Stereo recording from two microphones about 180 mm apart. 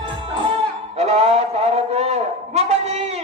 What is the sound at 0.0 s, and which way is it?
Music, 30° right (ahead or behind).